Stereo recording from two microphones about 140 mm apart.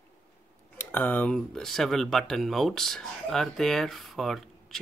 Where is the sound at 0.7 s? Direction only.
15° left (ahead or behind).